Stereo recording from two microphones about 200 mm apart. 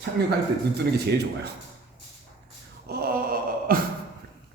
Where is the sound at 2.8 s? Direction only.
50° right (ahead or behind).